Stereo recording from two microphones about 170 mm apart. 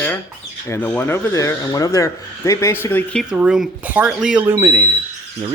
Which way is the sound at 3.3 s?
5° right (ahead or behind).